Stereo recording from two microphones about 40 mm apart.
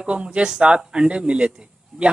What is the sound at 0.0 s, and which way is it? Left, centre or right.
A man's voice, right.